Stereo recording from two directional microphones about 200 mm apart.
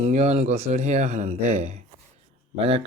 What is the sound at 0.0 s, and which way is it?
Speech, 35° right (ahead or behind).